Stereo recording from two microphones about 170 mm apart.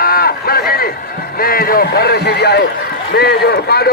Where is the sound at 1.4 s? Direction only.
60° left (ahead or behind).